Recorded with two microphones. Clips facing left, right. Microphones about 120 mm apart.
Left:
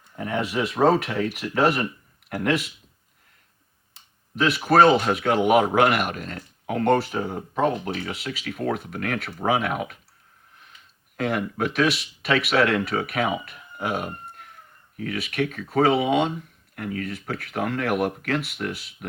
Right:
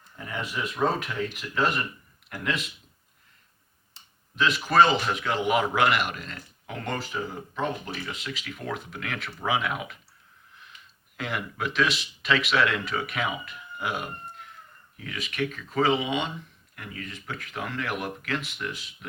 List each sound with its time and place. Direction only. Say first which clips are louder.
0.2 s speech: left 7 dB; 65° left (ahead or behind)
4.4 s speech: left 4 dB; 65° left (ahead or behind); by 10.0 s 45° left (ahead or behind)
11.2 s speech: left 7 dB; 45° left (ahead or behind)
11.9 s speech: left 3 dB; 60° left (ahead or behind)
13.4 s a sound: left 3 dB; 40° left (ahead or behind)
14.9 s speech: left 5 dB; 65° left (ahead or behind)